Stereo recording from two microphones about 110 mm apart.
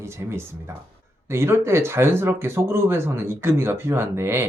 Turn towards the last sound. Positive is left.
turn(degrees=-25)  # may be behind; listen again after turning